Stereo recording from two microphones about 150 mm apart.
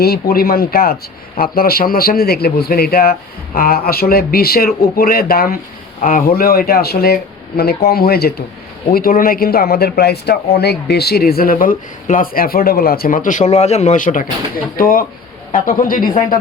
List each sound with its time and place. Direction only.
0.0 s a man's voice: 85° left
6.0 s speech: 65° left (ahead or behind); by 8.4 s 90° left
8.9 s speech: 75° left (ahead or behind)